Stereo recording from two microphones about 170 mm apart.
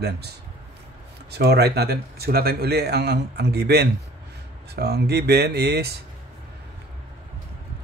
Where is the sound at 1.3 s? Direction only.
75° right (ahead or behind).